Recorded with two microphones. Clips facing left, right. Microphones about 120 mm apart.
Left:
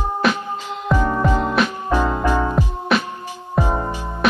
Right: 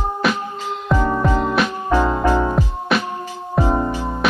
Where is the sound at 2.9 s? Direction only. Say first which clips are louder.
Left 1 dB; centre (ahead or behind).